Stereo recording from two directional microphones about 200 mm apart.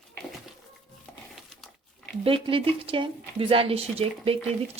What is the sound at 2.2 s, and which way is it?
Speech, 25° right (ahead or behind).